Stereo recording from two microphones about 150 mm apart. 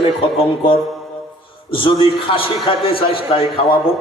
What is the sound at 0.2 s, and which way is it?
A man's voice, 35° left (ahead or behind).